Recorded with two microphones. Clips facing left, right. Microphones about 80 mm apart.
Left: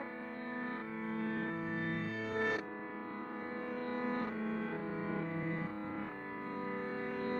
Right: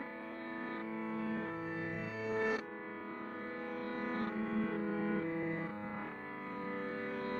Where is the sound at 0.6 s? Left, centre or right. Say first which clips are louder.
Even; left.